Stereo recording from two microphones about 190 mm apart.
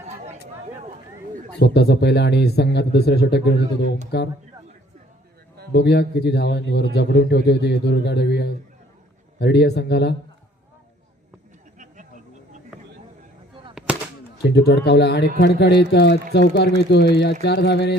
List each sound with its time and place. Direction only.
1.5 s a man's voice: 60° left (ahead or behind)
5.7 s a man's voice: 60° left (ahead or behind)
13.9 s gunshot: 5° right (ahead or behind)
14.5 s a man's voice: 60° left (ahead or behind)